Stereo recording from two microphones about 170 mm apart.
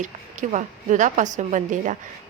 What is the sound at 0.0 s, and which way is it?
Speech, 45° right (ahead or behind).